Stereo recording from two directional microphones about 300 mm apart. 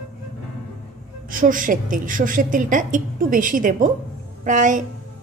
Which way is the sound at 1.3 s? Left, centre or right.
Right.